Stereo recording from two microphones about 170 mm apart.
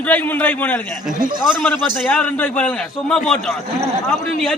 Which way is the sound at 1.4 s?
5° right (ahead or behind).